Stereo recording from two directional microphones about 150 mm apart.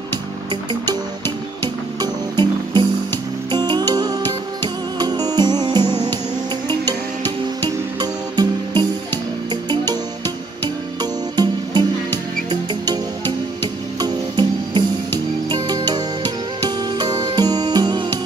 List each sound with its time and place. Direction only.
1.6 s music: 30° right (ahead or behind)
7.6 s music: 30° right (ahead or behind)